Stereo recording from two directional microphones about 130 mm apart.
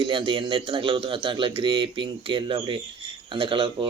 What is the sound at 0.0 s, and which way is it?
A man's voice, 40° right (ahead or behind).